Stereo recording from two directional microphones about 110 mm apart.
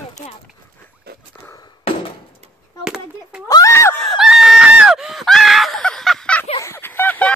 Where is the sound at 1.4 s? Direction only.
15° left (ahead or behind).